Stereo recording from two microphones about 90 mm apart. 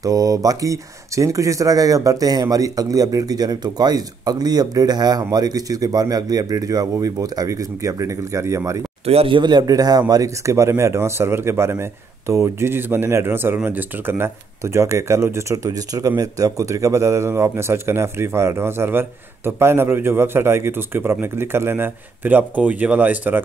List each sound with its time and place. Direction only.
0.0 s speech: 40° right (ahead or behind)
9.0 s a man's voice: 90° right
9.4 s a man's voice: 50° right (ahead or behind); by 23.4 s 20° right (ahead or behind)